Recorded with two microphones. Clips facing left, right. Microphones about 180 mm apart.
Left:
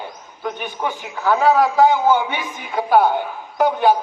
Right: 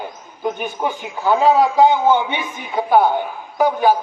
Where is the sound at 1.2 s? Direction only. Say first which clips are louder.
Right 1 dB; 25° right (ahead or behind).